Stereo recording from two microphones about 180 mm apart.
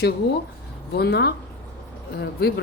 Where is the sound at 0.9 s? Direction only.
65° left (ahead or behind).